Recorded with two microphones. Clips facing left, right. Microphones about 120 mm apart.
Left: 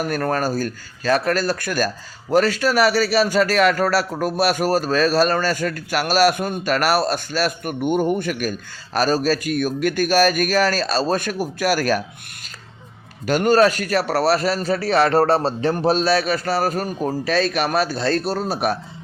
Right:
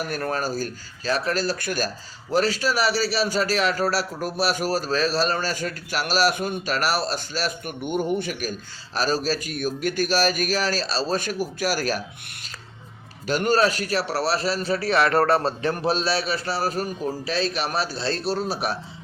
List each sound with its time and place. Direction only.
0.0 s a man's voice: 50° left (ahead or behind)
13.2 s a man's voice: 50° left (ahead or behind)